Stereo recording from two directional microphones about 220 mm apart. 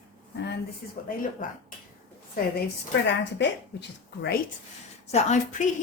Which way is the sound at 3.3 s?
50° left (ahead or behind).